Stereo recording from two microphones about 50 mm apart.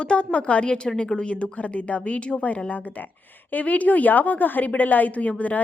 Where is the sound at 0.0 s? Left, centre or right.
Left.